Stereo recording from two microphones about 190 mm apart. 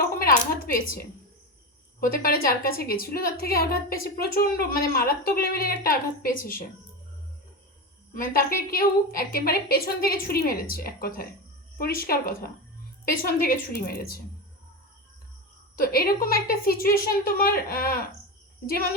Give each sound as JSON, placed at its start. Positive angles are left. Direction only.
{"t": 0.2, "sound": "a woman's voice", "side_deg": 50}
{"t": 2.1, "sound": "a woman's voice", "side_deg": 50}
{"t": 8.1, "sound": "a woman's voice", "side_deg": 45}
{"t": 15.8, "sound": "a woman's voice", "side_deg": 50}